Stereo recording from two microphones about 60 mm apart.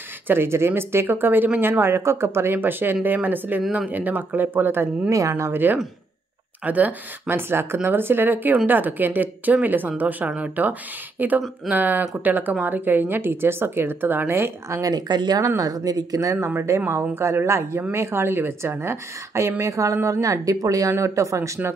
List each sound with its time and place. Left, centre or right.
0.3 s speech: right
14.7 s speech: right
16.3 s speech: right
19.6 s speech: right
21.0 s speech: right